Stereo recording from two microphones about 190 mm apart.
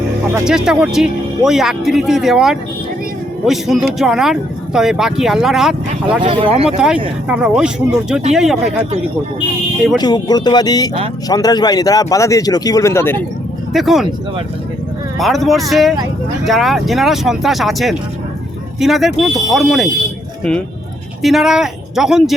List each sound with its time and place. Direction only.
0.4 s speech: 5° right (ahead or behind)
6.2 s speech: 30° right (ahead or behind)
6.7 s speech: 5° right (ahead or behind)
10.0 s speech: 20° left (ahead or behind)
13.7 s speech: centre (ahead or behind)
15.2 s speech: centre (ahead or behind)
21.2 s speech: centre (ahead or behind)